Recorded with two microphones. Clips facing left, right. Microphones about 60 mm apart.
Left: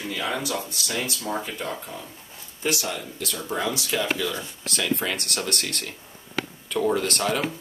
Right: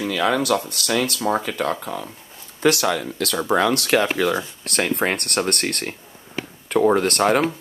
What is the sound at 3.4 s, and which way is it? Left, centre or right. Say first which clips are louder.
Speech: right 9 dB; right.